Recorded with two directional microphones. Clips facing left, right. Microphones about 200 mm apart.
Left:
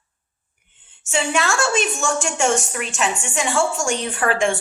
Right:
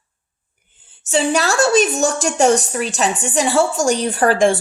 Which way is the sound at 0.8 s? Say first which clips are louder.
Right 6 dB; 35° right (ahead or behind).